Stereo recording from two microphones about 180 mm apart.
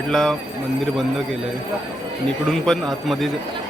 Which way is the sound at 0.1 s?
5° left (ahead or behind).